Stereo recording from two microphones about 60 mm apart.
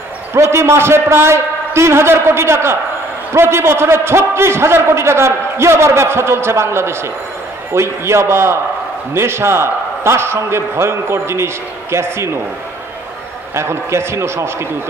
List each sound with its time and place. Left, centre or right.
0.3 s a man's voice: right
13.6 s a man's voice: right